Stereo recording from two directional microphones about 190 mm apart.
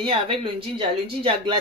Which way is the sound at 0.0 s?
25° right (ahead or behind).